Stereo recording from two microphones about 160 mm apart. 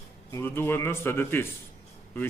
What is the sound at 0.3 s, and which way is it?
Speech, 15° left (ahead or behind).